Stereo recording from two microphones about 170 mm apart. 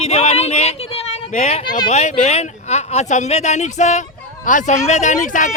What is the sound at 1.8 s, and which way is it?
Speech, 40° left (ahead or behind).